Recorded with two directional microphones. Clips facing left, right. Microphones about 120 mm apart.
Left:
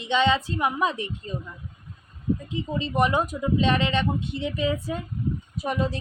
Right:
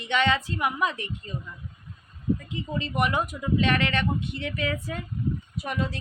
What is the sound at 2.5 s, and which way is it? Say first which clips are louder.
A woman's voice: left 3 dB; 25° left (ahead or behind).